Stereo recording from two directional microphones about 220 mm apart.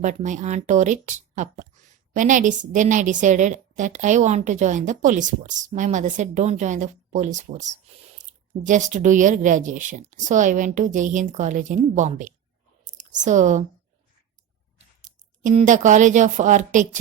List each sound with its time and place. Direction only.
0.0 s speech: 35° right (ahead or behind)
12.8 s a sound: 35° right (ahead or behind)
15.0 s a woman's voice: 35° right (ahead or behind)